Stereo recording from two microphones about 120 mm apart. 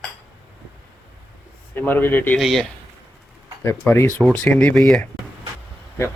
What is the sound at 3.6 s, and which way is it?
Speech, 15° left (ahead or behind).